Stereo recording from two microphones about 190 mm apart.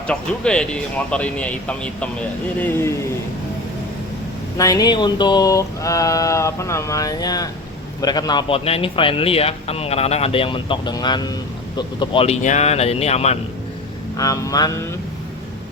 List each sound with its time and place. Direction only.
0.1 s speech: 5° left (ahead or behind)
4.5 s a man's voice: 15° left (ahead or behind); by 13.3 s 35° left (ahead or behind)
14.2 s a man's voice: 20° left (ahead or behind)